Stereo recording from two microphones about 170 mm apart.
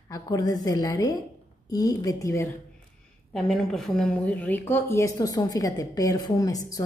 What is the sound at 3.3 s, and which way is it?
A woman's voice, centre (ahead or behind).